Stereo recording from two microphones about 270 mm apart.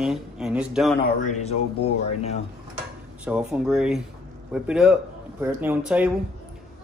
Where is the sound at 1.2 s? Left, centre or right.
Left.